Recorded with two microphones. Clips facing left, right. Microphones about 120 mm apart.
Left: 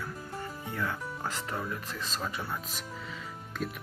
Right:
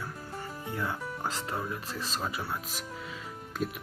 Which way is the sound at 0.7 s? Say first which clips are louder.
Even; 15° right (ahead or behind).